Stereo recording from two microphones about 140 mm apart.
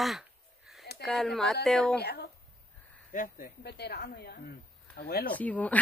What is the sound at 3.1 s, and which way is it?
Speech, 90° left.